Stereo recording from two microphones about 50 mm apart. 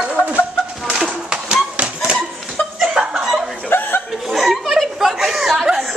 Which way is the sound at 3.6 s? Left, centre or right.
Left.